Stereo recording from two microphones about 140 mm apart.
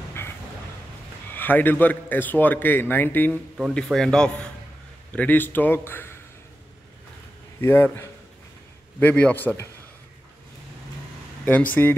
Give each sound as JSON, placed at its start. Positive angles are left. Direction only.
{"t": 1.3, "sound": "a man's voice", "side_deg": 15}
{"t": 7.6, "sound": "a man's voice", "side_deg": 15}
{"t": 11.4, "sound": "a man's voice", "side_deg": 10}